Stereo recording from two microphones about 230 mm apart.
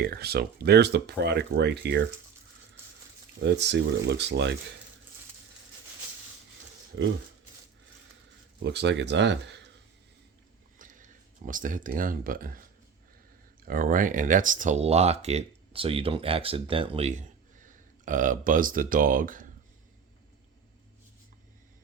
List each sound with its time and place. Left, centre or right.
0.0 s speech: right
3.4 s speech: right
8.6 s speech: right
10.8 s speech: right
13.7 s speech: right